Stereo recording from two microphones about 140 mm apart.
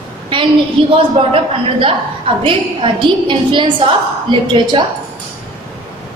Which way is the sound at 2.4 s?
40° right (ahead or behind).